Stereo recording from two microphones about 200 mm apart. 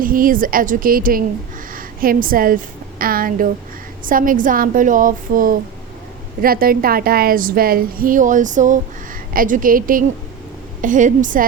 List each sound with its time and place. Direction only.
0.0 s a woman's voice: 45° right (ahead or behind)